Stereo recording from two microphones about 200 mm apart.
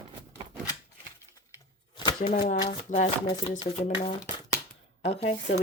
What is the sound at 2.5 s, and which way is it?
Speech, 25° left (ahead or behind).